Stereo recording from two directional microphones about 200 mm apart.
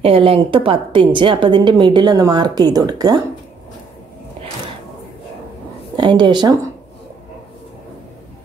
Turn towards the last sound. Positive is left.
turn(degrees=-20)  # may be behind; listen again after turning